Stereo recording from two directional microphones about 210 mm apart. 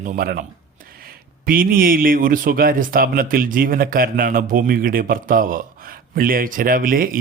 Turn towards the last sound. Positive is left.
turn(degrees=-40)  # may be behind; listen again after turning